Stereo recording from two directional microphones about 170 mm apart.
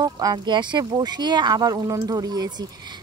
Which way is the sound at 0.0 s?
25° right (ahead or behind).